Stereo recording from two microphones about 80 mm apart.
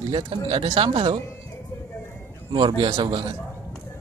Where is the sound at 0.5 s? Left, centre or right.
Right.